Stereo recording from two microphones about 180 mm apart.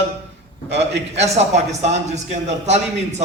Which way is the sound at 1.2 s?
35° right (ahead or behind).